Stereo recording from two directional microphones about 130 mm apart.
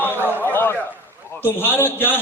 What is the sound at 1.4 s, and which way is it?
Speech, 15° left (ahead or behind).